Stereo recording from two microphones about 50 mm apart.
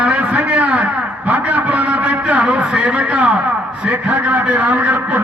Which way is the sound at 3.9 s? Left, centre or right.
Right.